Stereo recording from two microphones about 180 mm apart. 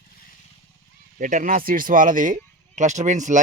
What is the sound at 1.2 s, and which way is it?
Speech, 45° right (ahead or behind).